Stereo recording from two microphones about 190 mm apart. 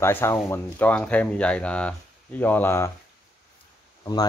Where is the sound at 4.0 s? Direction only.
20° left (ahead or behind).